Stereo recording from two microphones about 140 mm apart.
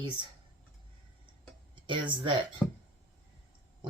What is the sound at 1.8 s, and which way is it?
Speech, 35° right (ahead or behind).